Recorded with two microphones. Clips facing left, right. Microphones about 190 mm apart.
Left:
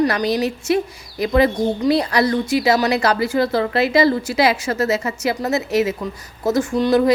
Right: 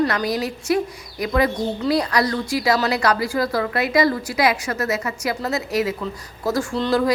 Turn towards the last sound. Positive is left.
turn(degrees=15)  # may be behind; listen again after turning